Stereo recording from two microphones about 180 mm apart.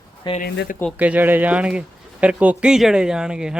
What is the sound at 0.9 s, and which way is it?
Speech, 10° right (ahead or behind).